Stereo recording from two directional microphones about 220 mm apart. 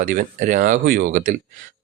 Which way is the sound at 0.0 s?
40° right (ahead or behind).